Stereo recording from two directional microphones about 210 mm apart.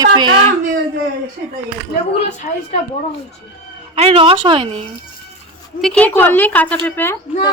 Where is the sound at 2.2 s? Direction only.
35° left (ahead or behind).